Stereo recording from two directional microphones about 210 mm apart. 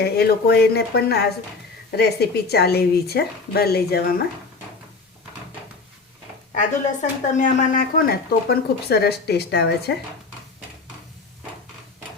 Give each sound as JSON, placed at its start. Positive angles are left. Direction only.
{"t": 0.0, "sound": "speech", "side_deg": 50}
{"t": 6.5, "sound": "speech", "side_deg": 35}